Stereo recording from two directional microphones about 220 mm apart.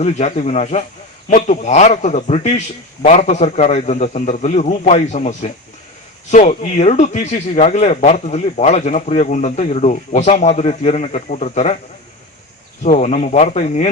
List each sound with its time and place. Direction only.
0.0 s speech: 30° left (ahead or behind)
12.8 s speech: 35° left (ahead or behind)